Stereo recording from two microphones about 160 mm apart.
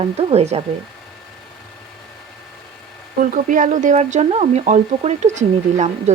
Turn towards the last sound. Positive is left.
turn(degrees=-45)  # may be behind; listen again after turning